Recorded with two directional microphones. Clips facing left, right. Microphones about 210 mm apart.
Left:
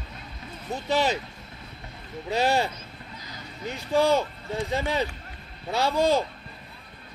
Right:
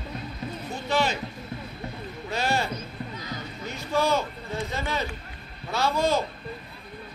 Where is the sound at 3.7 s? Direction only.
30° left (ahead or behind).